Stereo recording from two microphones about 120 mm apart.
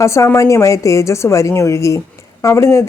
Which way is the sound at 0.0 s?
25° left (ahead or behind).